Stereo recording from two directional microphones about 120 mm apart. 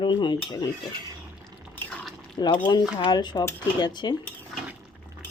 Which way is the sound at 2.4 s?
40° left (ahead or behind).